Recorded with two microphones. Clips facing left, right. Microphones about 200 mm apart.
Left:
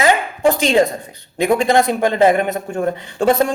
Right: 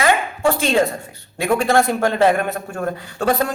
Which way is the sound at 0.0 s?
20° left (ahead or behind).